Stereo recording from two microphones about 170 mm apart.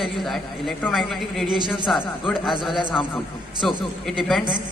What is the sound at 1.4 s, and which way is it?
Speech, 25° right (ahead or behind).